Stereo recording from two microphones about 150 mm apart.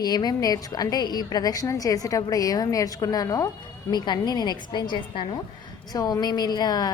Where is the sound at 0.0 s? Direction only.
25° left (ahead or behind).